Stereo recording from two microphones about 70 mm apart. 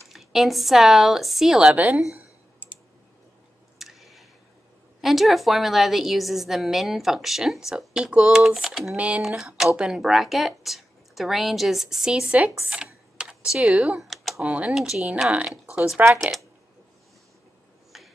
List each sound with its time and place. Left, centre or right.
0.1 s a woman's voice: centre
3.7 s a sound: centre
5.0 s a woman's voice: centre
8.9 s speech: centre
9.2 s a woman's voice: centre
12.6 s computer keyboard: centre
13.7 s speech: centre
14.0 s computer keyboard: centre
14.4 s speech: right
14.7 s a woman's voice: centre
16.2 s a woman's voice: centre
17.9 s a sound: centre